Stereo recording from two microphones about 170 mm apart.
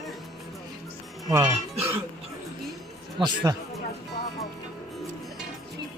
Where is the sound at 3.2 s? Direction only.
25° right (ahead or behind).